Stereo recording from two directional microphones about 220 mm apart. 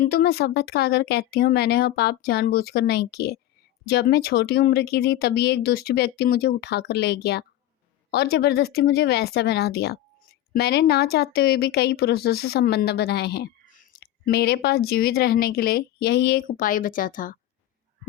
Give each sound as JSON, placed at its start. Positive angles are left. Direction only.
{"t": 0.0, "sound": "speech", "side_deg": 45}